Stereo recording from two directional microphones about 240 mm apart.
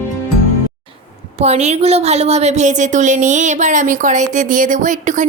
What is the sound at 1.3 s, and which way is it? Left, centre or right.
A woman's voice, right.